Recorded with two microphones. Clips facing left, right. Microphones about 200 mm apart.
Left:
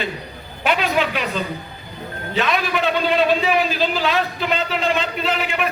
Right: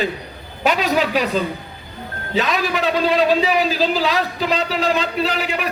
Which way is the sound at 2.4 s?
35° right (ahead or behind).